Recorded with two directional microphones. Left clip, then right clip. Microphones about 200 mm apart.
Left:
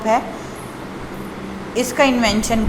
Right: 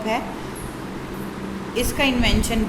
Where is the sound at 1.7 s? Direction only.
15° left (ahead or behind).